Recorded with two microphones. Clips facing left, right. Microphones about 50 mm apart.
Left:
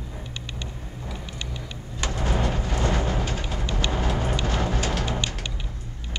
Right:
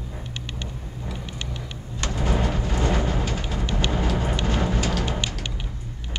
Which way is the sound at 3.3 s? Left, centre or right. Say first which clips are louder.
Right 2 dB; centre.